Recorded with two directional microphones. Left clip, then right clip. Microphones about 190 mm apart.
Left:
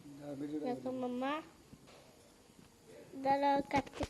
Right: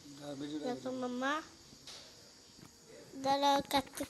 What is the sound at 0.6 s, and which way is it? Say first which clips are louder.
Speech: right 1 dB; 10° right (ahead or behind).